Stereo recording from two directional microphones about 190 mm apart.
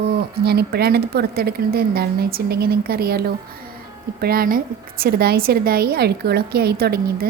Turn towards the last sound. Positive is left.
turn(degrees=-55)  # may be behind; listen again after turning